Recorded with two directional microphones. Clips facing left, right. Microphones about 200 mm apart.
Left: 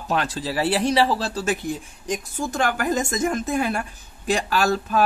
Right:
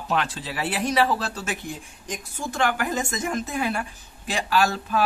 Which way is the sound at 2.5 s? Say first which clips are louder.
Left 2 dB; 40° left (ahead or behind).